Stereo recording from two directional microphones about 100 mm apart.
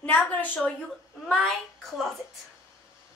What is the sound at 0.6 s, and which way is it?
A woman's voice, 10° left (ahead or behind).